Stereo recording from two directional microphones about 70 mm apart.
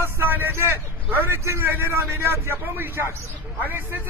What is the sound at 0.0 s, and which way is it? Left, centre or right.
A man's voice, right.